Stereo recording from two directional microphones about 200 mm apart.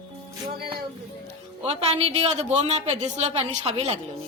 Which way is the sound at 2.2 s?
30° right (ahead or behind).